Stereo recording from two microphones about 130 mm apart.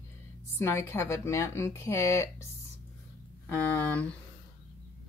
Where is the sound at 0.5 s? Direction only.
20° left (ahead or behind).